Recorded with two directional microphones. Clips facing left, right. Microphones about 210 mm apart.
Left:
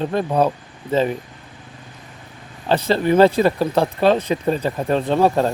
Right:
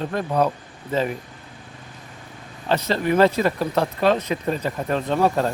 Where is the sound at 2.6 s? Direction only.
30° left (ahead or behind).